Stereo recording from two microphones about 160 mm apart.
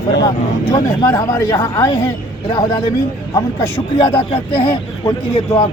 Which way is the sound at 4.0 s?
35° left (ahead or behind).